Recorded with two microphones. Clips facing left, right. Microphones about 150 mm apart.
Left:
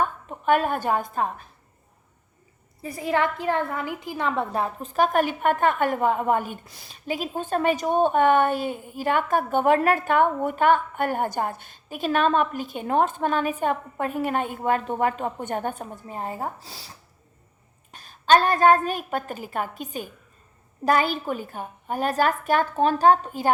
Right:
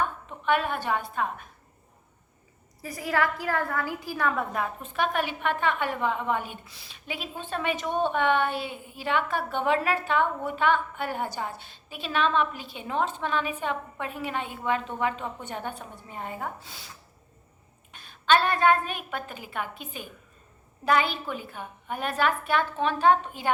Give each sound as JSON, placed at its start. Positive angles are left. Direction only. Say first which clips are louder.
{"t": 0.3, "sound": "a woman's voice", "louder": "left 5 dB", "side_deg": 45}
{"t": 2.8, "sound": "a woman's voice", "louder": "left 3 dB", "side_deg": 25}
{"t": 17.9, "sound": "a woman's voice", "louder": "left 4 dB", "side_deg": 40}